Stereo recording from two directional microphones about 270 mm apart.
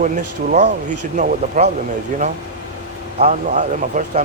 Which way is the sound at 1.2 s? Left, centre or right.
Right.